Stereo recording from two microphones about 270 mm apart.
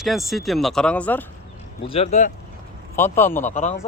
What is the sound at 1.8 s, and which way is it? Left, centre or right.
Speech, left.